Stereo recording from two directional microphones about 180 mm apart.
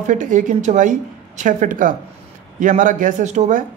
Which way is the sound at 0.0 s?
45° right (ahead or behind).